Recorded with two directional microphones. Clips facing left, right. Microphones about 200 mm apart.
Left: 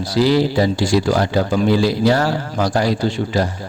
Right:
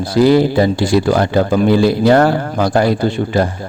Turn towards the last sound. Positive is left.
turn(degrees=-55)  # may be behind; listen again after turning